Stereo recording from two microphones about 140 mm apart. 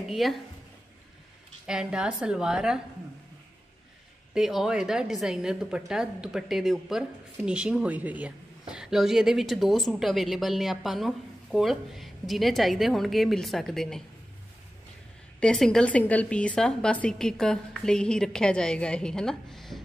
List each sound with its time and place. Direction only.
0.1 s a woman's voice: centre (ahead or behind)
1.7 s a woman's voice: 5° right (ahead or behind)
4.3 s a woman's voice: centre (ahead or behind)
15.4 s a woman's voice: 5° left (ahead or behind)